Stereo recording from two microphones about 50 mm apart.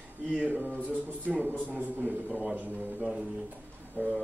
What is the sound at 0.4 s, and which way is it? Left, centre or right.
A man's voice, right.